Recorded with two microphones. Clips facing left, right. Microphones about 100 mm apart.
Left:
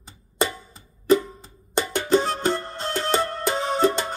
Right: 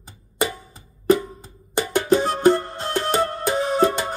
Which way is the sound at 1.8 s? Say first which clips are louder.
Right 2 dB; 15° right (ahead or behind).